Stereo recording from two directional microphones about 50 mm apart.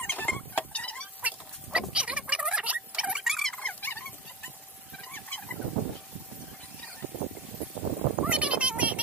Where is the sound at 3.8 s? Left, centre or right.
Left.